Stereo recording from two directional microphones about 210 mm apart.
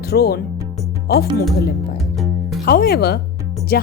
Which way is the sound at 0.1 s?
50° left (ahead or behind).